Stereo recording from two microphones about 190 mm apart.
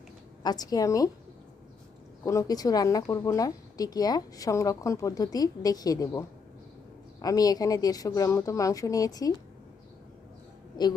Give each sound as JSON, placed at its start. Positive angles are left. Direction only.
{"t": 0.4, "sound": "a woman's voice", "side_deg": 20}
{"t": 2.2, "sound": "a woman's voice", "side_deg": 20}
{"t": 10.8, "sound": "a woman's voice", "side_deg": 20}